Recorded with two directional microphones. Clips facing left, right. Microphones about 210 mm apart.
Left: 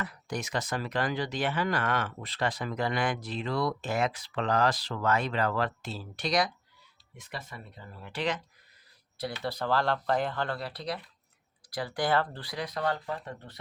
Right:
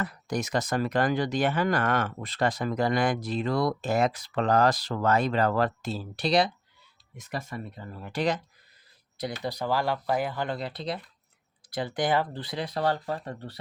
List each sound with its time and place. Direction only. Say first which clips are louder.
0.0 s speech: right 5 dB; 40° right (ahead or behind)
7.2 s speech: right 7 dB; 45° right (ahead or behind)
9.4 s speech: right 1 dB; 15° right (ahead or behind); by 13.6 s 35° right (ahead or behind)